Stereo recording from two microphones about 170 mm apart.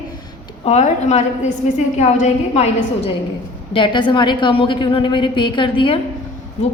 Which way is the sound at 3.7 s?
30° left (ahead or behind).